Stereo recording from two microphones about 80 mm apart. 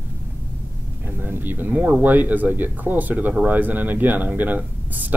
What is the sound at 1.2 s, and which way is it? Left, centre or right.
Speech, right.